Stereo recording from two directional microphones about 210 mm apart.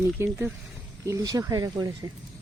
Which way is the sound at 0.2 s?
10° right (ahead or behind).